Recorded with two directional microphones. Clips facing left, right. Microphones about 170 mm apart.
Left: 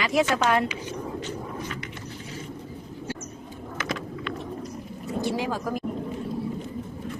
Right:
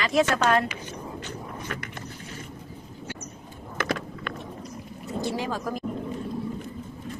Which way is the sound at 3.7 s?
55° right (ahead or behind).